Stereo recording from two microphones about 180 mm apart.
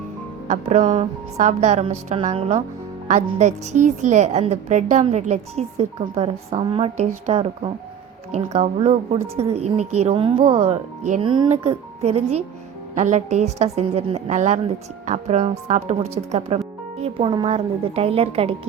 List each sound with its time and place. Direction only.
0.4 s a woman's voice: 40° right (ahead or behind)
11.2 s a woman's voice: 30° right (ahead or behind)